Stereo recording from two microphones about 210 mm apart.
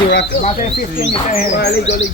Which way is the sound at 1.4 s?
50° left (ahead or behind).